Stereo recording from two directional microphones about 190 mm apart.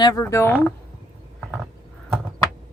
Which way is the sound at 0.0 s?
20° left (ahead or behind).